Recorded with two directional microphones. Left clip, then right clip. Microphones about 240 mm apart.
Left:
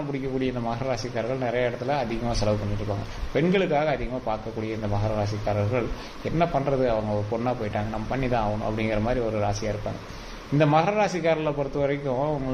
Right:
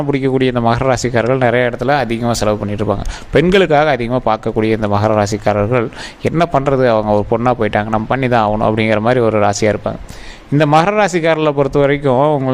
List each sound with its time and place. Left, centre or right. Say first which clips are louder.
0.1 s a man's voice: right 15 dB; right